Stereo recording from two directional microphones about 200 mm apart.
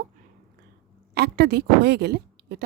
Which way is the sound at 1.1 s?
55° right (ahead or behind).